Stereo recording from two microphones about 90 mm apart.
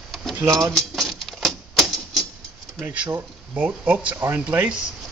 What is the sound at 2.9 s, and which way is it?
Speech, 20° right (ahead or behind).